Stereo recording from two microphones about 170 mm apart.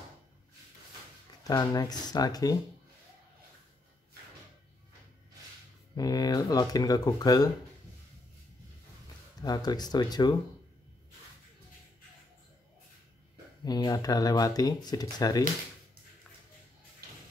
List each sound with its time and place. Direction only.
1.5 s speech: 20° left (ahead or behind)
5.9 s speech: 20° left (ahead or behind)
9.4 s speech: 25° left (ahead or behind)
13.7 s speech: 20° left (ahead or behind)